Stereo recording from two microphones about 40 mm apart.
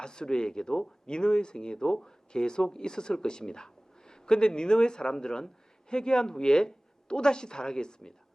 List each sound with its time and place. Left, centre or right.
0.0 s speech: centre